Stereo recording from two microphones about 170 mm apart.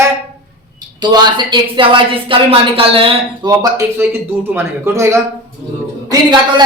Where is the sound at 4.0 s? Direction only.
15° right (ahead or behind).